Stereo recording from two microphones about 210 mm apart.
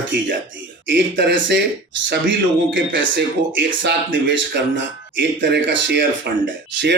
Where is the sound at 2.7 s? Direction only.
60° right (ahead or behind).